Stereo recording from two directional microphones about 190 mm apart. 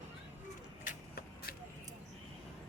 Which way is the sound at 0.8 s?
55° left (ahead or behind).